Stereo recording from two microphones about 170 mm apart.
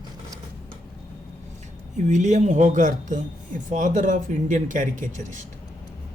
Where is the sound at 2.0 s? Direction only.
45° right (ahead or behind).